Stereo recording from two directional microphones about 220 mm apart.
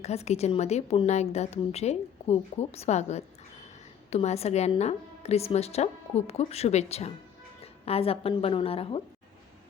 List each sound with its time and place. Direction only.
0.0 s a woman's voice: 30° left (ahead or behind)